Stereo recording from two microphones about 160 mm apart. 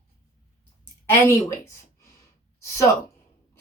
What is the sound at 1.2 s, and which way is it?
Speech, 15° left (ahead or behind).